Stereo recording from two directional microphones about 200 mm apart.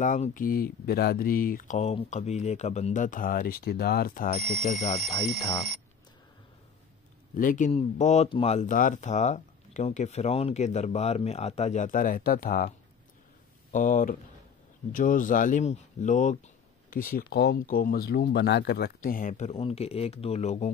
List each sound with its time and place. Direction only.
0.0 s speech: 40° left (ahead or behind)
4.4 s speech: centre (ahead or behind)
7.3 s speech: 40° left (ahead or behind)